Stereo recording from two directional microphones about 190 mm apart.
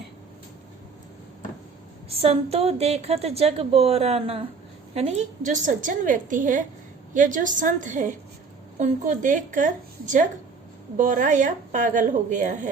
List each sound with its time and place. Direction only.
2.0 s a woman's voice: 35° right (ahead or behind)